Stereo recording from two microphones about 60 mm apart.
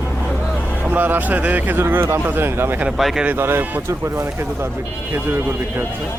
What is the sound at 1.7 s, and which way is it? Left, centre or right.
Speech, right.